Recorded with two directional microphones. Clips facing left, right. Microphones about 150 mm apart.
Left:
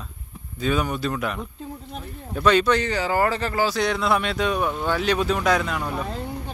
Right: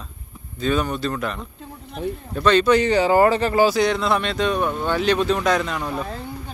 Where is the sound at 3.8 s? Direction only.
5° left (ahead or behind).